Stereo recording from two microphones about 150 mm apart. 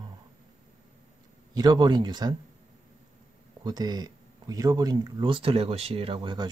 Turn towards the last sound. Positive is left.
turn(degrees=-35)  # may be behind; listen again after turning